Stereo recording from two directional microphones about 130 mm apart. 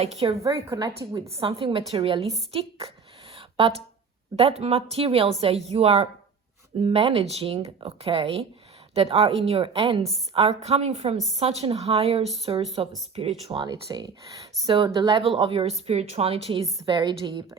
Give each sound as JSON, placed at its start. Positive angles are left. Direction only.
{"t": 0.0, "sound": "speech", "side_deg": -55}
{"t": 0.3, "sound": "a woman's voice", "side_deg": -25}
{"t": 1.4, "sound": "a woman's voice", "side_deg": -40}
{"t": 3.3, "sound": "a sound", "side_deg": -45}
{"t": 4.4, "sound": "speech", "side_deg": -50}
{"t": 13.5, "sound": "a woman's voice", "side_deg": -40}